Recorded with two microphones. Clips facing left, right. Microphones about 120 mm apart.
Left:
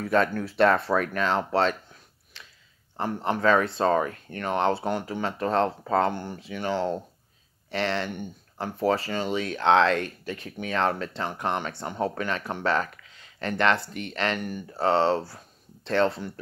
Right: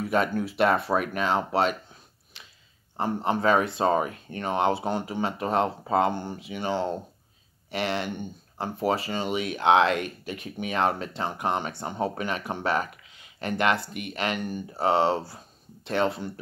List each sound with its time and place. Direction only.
0.0 s speech: 15° right (ahead or behind)
2.3 s chewing: 15° right (ahead or behind)
3.0 s speech: 15° right (ahead or behind)